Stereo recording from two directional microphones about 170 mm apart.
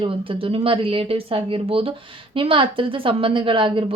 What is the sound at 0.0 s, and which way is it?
A woman's voice, 30° right (ahead or behind).